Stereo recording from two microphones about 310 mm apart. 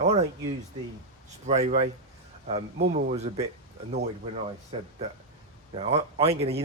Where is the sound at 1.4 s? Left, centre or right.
Right.